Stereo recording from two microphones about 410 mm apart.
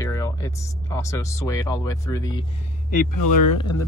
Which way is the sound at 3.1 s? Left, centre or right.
Left.